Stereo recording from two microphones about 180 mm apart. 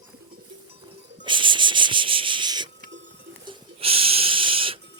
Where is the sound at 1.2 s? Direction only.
25° right (ahead or behind).